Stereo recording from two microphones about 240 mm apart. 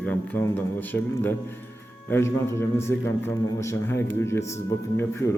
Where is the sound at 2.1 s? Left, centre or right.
Centre.